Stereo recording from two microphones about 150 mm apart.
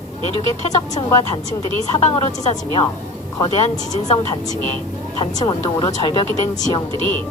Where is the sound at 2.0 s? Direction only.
50° left (ahead or behind).